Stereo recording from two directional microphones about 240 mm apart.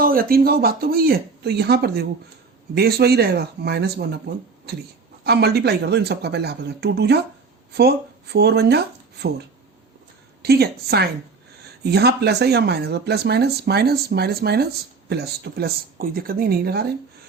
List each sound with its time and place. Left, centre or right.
0.0 s speech: right
5.2 s speech: right
10.4 s speech: right